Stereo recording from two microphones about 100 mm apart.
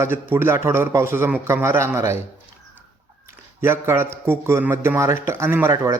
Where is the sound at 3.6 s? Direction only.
25° right (ahead or behind).